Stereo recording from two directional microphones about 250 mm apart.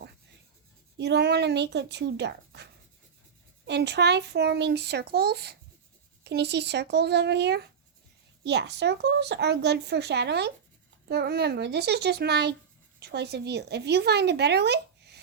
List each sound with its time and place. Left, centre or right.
0.9 s speech: right
3.7 s speech: right